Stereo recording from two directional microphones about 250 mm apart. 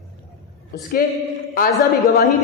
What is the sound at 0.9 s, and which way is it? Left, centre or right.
Speech, left.